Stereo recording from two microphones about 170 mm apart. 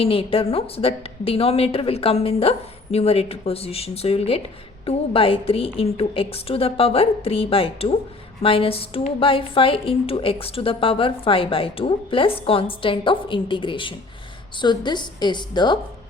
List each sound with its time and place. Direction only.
0.0 s a woman's voice: 35° left (ahead or behind)